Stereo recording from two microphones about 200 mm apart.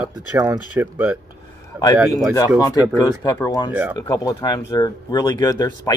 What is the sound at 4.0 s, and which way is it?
Speech, 20° left (ahead or behind).